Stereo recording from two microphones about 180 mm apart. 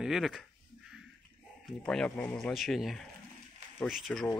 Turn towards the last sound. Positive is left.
turn(degrees=0)  # may be behind; listen again after turning